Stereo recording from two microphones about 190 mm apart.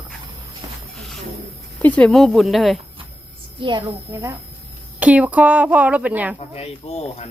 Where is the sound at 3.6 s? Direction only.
25° right (ahead or behind); by 6.3 s 10° right (ahead or behind).